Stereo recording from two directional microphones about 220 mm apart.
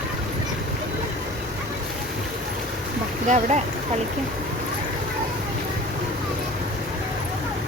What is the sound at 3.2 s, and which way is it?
Speech, 35° right (ahead or behind).